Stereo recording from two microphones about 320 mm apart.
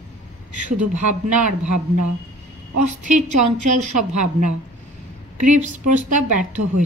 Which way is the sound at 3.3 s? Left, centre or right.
Right.